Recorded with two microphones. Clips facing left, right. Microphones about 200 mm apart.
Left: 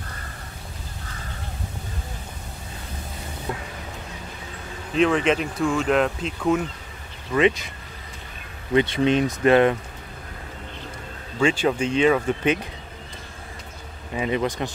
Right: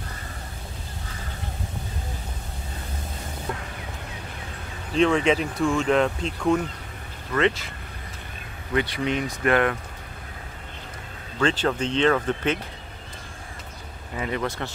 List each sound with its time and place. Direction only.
4.9 s speech: centre (ahead or behind)
7.3 s speech: 15° left (ahead or behind)
8.7 s speech: 25° left (ahead or behind)
11.3 s speech: 10° left (ahead or behind)
14.1 s speech: 20° left (ahead or behind)